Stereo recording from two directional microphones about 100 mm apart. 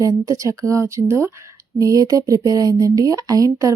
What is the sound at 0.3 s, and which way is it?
A woman's voice, 35° right (ahead or behind).